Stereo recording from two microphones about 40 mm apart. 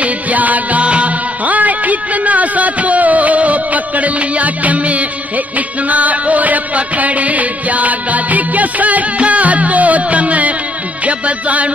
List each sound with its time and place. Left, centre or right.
0.0 s music: right